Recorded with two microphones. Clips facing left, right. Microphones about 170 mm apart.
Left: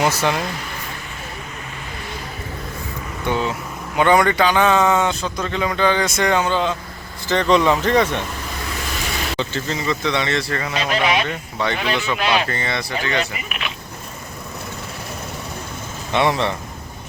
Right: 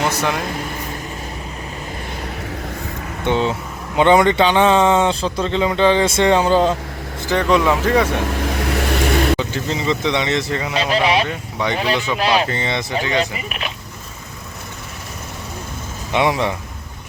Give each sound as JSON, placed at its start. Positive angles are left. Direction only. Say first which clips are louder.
{"t": 0.2, "sound": "speech", "louder": "even", "side_deg": 0}
{"t": 3.2, "sound": "speech", "louder": "right 3 dB", "side_deg": -25}
{"t": 7.3, "sound": "speech", "louder": "even", "side_deg": -10}
{"t": 8.2, "sound": "vehicle", "louder": "right 8 dB", "side_deg": -65}
{"t": 9.4, "sound": "speech", "louder": "right 2 dB", "side_deg": -10}
{"t": 10.8, "sound": "speech", "louder": "right 3 dB", "side_deg": -30}
{"t": 11.6, "sound": "speech", "louder": "right 1 dB", "side_deg": -15}
{"t": 12.1, "sound": "speech", "louder": "right 3 dB", "side_deg": -35}
{"t": 12.5, "sound": "speech", "louder": "right 2 dB", "side_deg": -20}
{"t": 13.5, "sound": "a sound", "louder": "right 2 dB", "side_deg": -35}
{"t": 16.1, "sound": "speech", "louder": "right 1 dB", "side_deg": -10}